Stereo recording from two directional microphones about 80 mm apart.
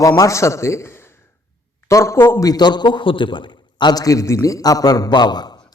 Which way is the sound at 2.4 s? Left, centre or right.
Left.